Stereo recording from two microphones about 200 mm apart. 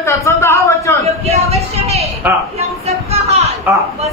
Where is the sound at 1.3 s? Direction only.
30° right (ahead or behind).